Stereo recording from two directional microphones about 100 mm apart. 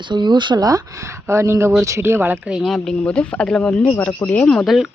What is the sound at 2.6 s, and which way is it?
Speech, 5° left (ahead or behind).